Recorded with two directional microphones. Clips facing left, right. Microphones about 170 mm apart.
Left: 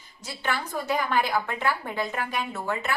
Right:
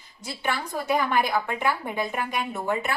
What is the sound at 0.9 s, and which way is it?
A woman's voice, 15° right (ahead or behind).